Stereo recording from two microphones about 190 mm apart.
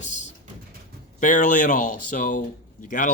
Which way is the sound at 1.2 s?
45° left (ahead or behind).